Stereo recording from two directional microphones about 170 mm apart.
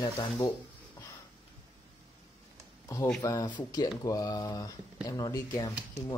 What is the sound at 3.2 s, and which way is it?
Speech, 25° left (ahead or behind).